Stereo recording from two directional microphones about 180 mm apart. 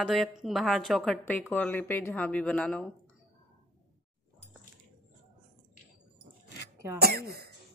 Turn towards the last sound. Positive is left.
turn(degrees=-60)  # may be behind; listen again after turning